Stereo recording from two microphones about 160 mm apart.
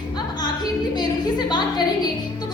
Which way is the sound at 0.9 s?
25° left (ahead or behind).